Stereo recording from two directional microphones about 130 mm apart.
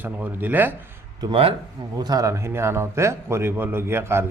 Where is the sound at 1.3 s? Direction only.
45° right (ahead or behind).